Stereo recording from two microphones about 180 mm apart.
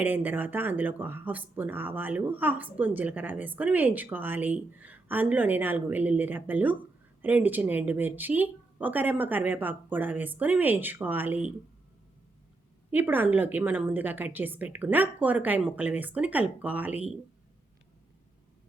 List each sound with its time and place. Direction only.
0.0 s speech: 10° right (ahead or behind)
12.9 s speech: 10° right (ahead or behind)